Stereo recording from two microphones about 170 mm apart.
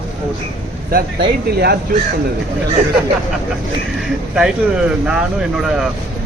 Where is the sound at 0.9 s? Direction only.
65° right (ahead or behind).